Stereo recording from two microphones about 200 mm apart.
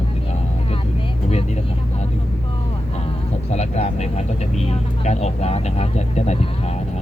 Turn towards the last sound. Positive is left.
turn(degrees=35)  # may be behind; listen again after turning